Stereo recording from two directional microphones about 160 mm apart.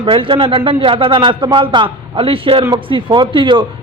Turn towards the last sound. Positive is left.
turn(degrees=-30)  # may be behind; listen again after turning